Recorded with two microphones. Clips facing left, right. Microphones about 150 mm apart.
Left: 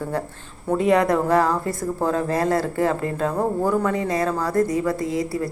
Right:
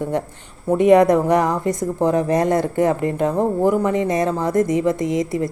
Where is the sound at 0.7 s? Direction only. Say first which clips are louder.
Right 6 dB; 20° right (ahead or behind).